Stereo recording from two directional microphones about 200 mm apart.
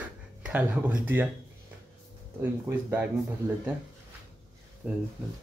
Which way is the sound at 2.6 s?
10° right (ahead or behind).